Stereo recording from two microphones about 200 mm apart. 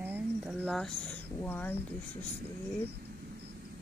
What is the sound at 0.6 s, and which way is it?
Speech, 5° left (ahead or behind).